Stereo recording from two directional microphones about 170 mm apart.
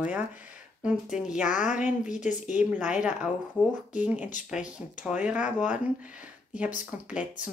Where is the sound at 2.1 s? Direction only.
45° left (ahead or behind).